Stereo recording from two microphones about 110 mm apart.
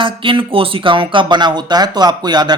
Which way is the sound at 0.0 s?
50° right (ahead or behind).